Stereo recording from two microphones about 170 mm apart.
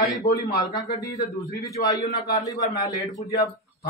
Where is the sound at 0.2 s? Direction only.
20° left (ahead or behind).